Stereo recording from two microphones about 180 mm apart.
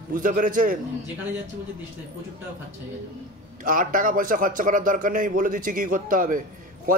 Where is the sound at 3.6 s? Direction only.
50° right (ahead or behind).